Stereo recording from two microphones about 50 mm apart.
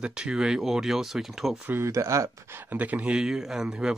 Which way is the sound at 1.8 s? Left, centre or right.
Right.